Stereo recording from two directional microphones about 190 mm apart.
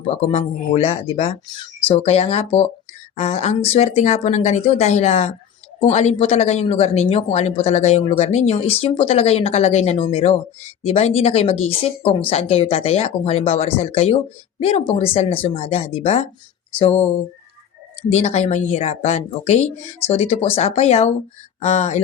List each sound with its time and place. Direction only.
0.1 s speech: 35° left (ahead or behind)
18.1 s speech: 35° left (ahead or behind)